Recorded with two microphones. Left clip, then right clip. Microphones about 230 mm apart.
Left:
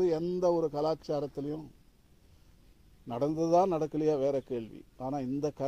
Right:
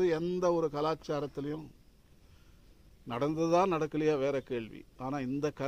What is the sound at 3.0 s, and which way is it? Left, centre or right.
A man's voice, centre.